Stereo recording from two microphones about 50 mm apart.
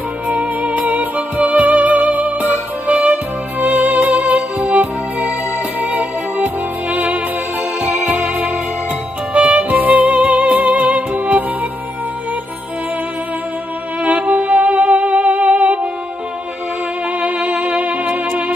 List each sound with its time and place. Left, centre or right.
0.3 s music: right
3.5 s music: right
14.0 s music: right
17.2 s music: right